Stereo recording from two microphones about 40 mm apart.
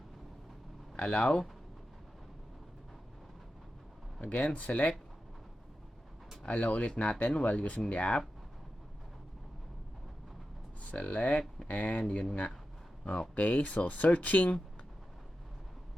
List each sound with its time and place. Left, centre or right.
0.9 s speech: left
4.2 s speech: left
6.4 s speech: left
10.8 s speech: left
13.3 s speech: left